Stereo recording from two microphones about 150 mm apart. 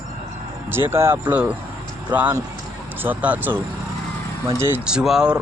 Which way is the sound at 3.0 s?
10° right (ahead or behind).